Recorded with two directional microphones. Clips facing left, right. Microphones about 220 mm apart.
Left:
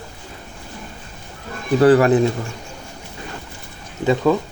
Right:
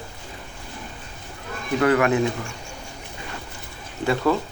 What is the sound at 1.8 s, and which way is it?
Speech, 35° left (ahead or behind).